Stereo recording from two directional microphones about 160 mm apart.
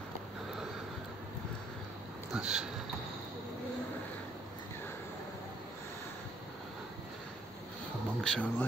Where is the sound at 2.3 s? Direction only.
5° right (ahead or behind).